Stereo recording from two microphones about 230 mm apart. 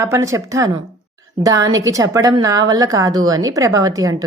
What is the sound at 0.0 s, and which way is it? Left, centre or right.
A woman's voice, centre.